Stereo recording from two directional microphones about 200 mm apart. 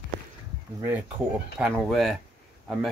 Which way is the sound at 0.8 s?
10° right (ahead or behind).